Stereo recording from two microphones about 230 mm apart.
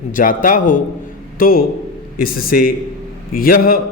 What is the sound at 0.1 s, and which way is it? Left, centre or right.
A man's voice, left.